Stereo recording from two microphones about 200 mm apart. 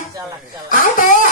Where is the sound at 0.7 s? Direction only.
45° left (ahead or behind).